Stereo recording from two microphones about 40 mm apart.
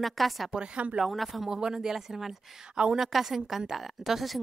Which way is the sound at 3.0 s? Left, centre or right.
Centre.